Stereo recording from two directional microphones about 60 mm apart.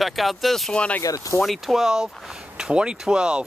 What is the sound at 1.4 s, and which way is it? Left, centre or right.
Speech, centre.